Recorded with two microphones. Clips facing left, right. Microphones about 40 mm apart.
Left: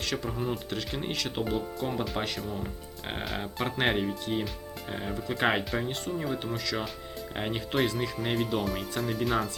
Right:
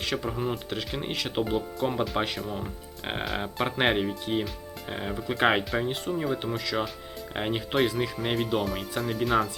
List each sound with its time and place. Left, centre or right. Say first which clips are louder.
0.0 s speech: right 2 dB; centre
3.8 s speech: right 2 dB; centre